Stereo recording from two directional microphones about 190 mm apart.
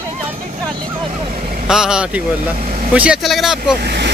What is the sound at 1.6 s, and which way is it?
Speech, 5° right (ahead or behind).